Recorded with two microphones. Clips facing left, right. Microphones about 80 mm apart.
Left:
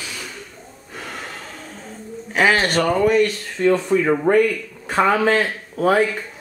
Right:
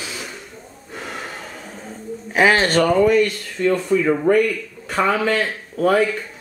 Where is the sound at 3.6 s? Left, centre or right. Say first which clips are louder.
Left 2 dB; left.